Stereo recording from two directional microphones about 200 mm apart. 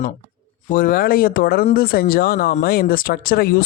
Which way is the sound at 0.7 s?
45° left (ahead or behind).